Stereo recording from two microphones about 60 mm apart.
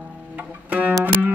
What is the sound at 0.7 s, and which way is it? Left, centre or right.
Music, right.